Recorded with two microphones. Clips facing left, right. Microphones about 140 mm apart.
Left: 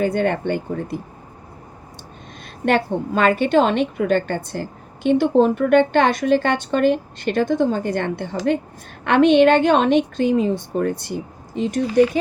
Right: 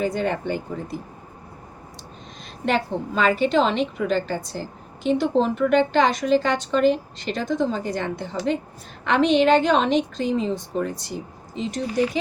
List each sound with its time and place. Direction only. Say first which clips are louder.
0.0 s a woman's voice: left 4 dB; 60° left (ahead or behind)
2.6 s a woman's voice: left 4 dB; 55° left (ahead or behind)